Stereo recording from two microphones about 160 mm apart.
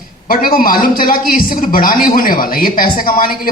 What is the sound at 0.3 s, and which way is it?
A man's voice, 65° left (ahead or behind).